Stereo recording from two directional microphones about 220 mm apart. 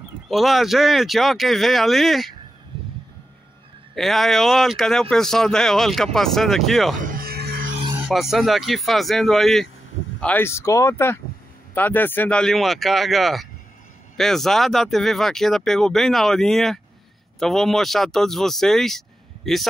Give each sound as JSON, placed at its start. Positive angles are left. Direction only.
{"t": 0.3, "sound": "speech", "side_deg": 0}
{"t": 3.9, "sound": "speech", "side_deg": 0}
{"t": 7.0, "sound": "music", "side_deg": -40}
{"t": 8.0, "sound": "speech", "side_deg": 0}